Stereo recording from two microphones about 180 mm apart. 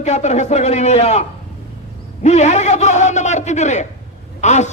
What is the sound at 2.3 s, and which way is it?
A man's voice, 40° left (ahead or behind).